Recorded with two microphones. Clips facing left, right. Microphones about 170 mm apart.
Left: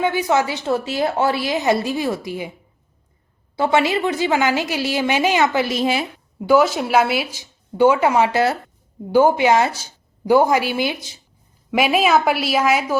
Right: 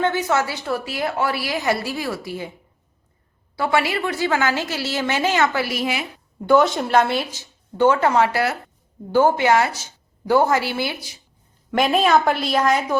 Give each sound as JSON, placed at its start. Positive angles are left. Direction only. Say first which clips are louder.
{"t": 0.0, "sound": "a woman's voice", "louder": "left 2 dB", "side_deg": 10}
{"t": 3.5, "sound": "a woman's voice", "louder": "left 3 dB", "side_deg": 20}
{"t": 6.4, "sound": "a woman's voice", "louder": "left 1 dB", "side_deg": 5}
{"t": 10.2, "sound": "speech", "louder": "left 3 dB", "side_deg": 15}
{"t": 11.7, "sound": "a woman's voice", "louder": "left 1 dB", "side_deg": 5}